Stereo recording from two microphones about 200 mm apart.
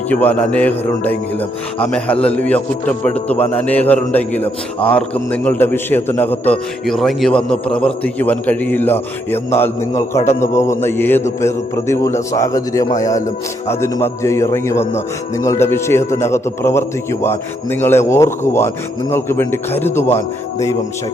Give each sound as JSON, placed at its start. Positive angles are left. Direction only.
{"t": 0.1, "sound": "a man's voice", "side_deg": 10}